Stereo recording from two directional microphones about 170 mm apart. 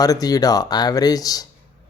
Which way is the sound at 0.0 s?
20° left (ahead or behind).